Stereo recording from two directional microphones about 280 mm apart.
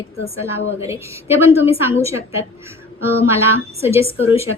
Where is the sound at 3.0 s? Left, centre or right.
Centre.